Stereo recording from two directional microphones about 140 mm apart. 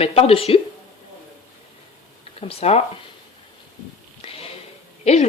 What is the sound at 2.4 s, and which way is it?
Speech, 45° left (ahead or behind).